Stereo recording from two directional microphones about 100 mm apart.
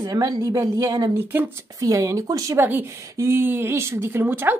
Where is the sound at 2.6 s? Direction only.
20° right (ahead or behind).